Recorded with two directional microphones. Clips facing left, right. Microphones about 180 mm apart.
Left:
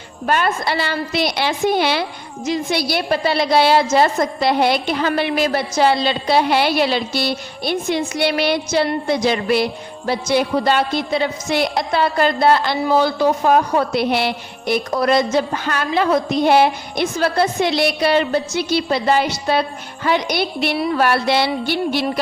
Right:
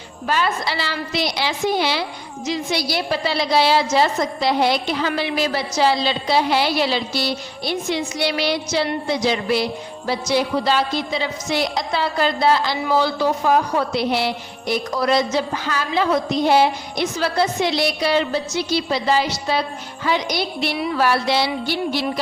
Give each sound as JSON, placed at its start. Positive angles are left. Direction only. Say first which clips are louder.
{"t": 0.3, "sound": "a woman's voice", "louder": "left 3 dB", "side_deg": 55}